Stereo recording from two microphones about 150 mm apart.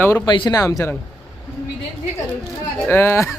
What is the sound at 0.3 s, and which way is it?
Speech, 30° left (ahead or behind).